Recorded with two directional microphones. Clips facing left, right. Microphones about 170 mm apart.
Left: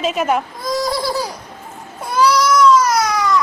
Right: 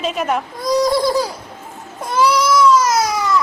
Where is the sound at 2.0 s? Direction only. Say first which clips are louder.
Left 1 dB; 5° right (ahead or behind).